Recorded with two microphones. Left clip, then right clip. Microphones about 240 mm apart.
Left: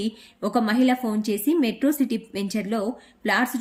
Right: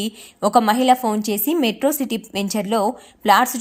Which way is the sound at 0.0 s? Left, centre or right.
Centre.